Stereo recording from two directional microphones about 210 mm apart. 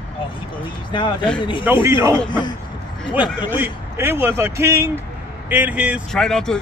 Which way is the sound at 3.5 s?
10° right (ahead or behind).